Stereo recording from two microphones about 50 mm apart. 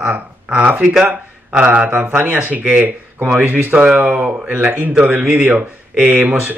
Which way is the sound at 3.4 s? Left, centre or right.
Right.